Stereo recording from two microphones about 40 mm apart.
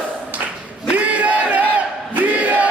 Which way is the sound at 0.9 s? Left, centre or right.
Right.